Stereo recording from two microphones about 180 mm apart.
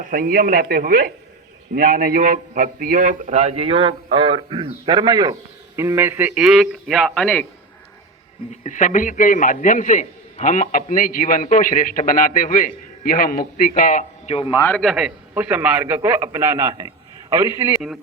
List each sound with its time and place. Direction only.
0.0 s a man's voice: 50° right (ahead or behind); by 7.4 s 5° left (ahead or behind)
8.6 s a man's voice: 45° left (ahead or behind)
14.5 s a man's voice: 15° left (ahead or behind)
14.8 s a man's voice: centre (ahead or behind); by 17.7 s 20° right (ahead or behind)
17.7 s speech: 5° right (ahead or behind)